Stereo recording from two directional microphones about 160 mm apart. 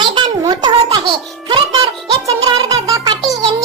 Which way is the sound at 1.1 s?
30° right (ahead or behind).